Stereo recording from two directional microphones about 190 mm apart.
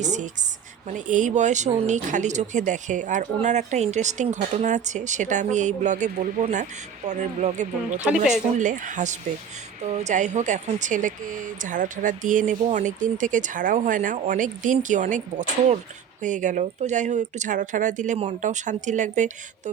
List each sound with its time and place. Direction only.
0.0 s speech: 40° right (ahead or behind)
8.1 s speech: 5° right (ahead or behind)
8.5 s speech: 40° right (ahead or behind)